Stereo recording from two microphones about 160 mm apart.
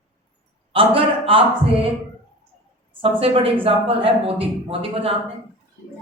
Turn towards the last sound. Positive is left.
turn(degrees=-35)  # may be behind; listen again after turning